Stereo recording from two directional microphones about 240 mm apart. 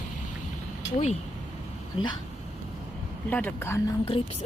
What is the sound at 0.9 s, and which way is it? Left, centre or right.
Speech, left.